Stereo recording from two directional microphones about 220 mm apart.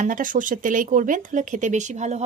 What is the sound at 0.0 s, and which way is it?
A woman's voice, 35° right (ahead or behind).